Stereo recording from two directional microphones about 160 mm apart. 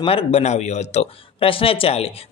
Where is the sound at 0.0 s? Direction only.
40° left (ahead or behind).